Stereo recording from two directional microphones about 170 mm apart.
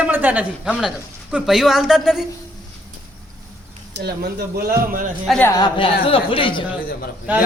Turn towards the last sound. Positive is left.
turn(degrees=-10)  # may be behind; listen again after turning